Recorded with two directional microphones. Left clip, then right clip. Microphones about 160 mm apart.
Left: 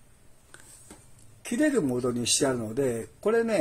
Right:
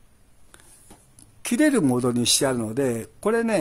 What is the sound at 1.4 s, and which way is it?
Speech, 45° right (ahead or behind).